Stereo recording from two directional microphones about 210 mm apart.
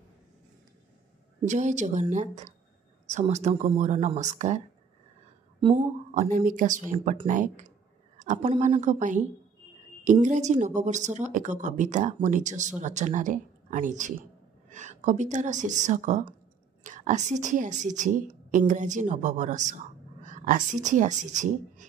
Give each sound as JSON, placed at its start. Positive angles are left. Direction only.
{"t": 1.4, "sound": "a woman's voice", "side_deg": -35}
{"t": 5.8, "sound": "a woman's voice", "side_deg": -40}
{"t": 10.2, "sound": "a woman's voice", "side_deg": -35}